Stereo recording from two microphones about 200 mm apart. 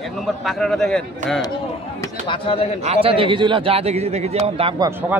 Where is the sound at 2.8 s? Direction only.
30° right (ahead or behind).